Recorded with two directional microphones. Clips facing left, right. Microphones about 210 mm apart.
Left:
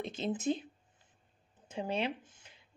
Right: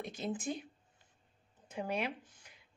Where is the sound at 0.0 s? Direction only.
25° left (ahead or behind).